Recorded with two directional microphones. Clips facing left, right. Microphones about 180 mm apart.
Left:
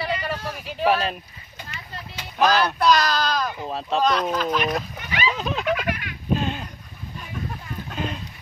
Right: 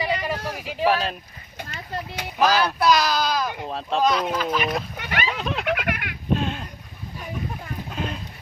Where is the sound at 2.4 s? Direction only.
5° right (ahead or behind).